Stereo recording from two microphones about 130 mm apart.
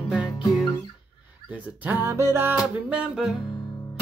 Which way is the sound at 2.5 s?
5° right (ahead or behind).